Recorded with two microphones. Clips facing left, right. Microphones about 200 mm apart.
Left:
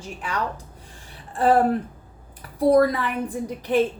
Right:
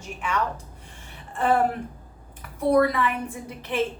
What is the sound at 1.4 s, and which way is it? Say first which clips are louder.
Speech: left 4 dB; 35° left (ahead or behind).